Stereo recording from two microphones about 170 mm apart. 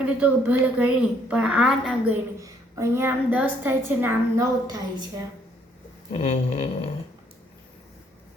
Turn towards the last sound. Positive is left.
turn(degrees=35)  # may be behind; listen again after turning